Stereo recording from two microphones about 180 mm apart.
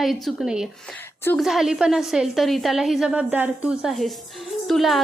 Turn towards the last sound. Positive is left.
turn(degrees=0)  # may be behind; listen again after turning